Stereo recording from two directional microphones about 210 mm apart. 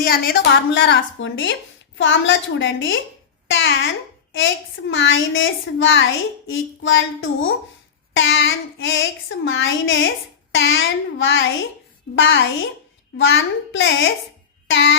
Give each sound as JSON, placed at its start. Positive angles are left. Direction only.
{"t": 0.0, "sound": "a woman's voice", "side_deg": 45}
{"t": 0.7, "sound": "a child's voice", "side_deg": 60}
{"t": 8.1, "sound": "a child's voice", "side_deg": 65}
{"t": 14.7, "sound": "a sound", "side_deg": 65}